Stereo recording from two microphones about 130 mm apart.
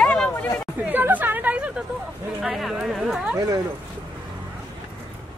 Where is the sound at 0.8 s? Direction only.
15° right (ahead or behind).